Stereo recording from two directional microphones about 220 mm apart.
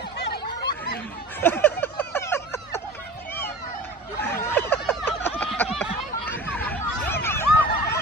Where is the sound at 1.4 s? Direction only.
10° left (ahead or behind).